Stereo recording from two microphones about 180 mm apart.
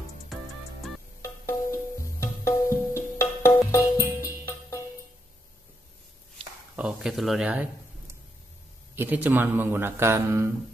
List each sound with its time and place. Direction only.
1.5 s music: 15° left (ahead or behind)
4.2 s music: 10° right (ahead or behind)
6.8 s speech: 5° right (ahead or behind)
8.9 s speech: 10° right (ahead or behind)